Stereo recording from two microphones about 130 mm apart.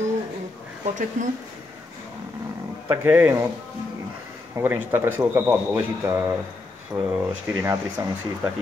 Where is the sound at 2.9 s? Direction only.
15° right (ahead or behind).